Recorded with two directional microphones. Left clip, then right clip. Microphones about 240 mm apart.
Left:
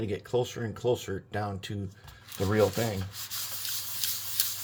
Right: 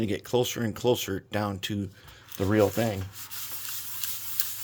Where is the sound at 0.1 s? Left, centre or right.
Right.